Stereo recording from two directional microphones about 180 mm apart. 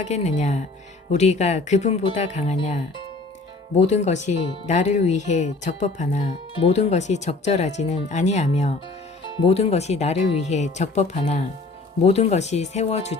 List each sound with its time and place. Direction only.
0.0 s speech: 40° left (ahead or behind)